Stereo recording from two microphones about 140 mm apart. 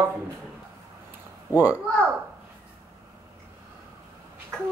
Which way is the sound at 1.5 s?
10° right (ahead or behind).